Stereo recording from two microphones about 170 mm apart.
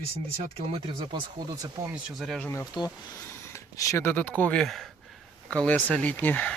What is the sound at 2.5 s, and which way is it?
Speech, 20° left (ahead or behind).